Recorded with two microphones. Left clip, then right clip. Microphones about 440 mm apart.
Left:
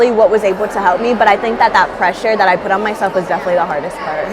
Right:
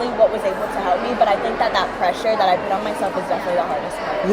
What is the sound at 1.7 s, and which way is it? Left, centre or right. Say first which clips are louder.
Speech: left 7 dB; left.